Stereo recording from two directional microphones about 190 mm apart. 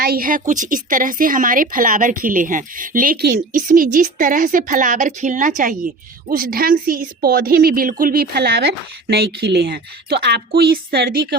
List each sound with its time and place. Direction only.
0.0 s a woman's voice: 50° right (ahead or behind)